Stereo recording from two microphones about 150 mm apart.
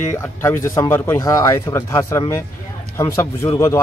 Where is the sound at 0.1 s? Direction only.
15° left (ahead or behind).